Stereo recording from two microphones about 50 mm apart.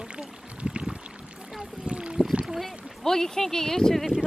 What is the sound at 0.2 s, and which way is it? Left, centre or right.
Pour, centre.